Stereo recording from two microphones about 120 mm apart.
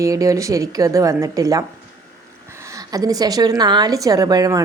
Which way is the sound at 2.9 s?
30° right (ahead or behind).